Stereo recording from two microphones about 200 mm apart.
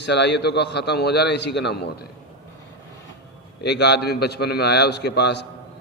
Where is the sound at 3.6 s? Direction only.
55° left (ahead or behind).